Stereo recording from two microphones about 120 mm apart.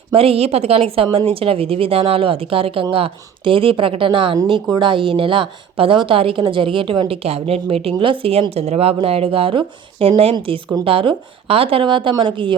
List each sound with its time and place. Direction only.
0.1 s a woman's voice: 55° right (ahead or behind)